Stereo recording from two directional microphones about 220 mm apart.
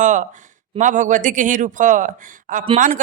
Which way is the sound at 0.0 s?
35° right (ahead or behind).